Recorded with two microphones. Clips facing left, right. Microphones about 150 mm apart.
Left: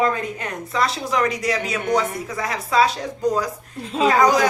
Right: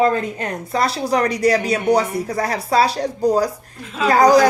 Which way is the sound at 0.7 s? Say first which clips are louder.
Right 3 dB; 35° right (ahead or behind).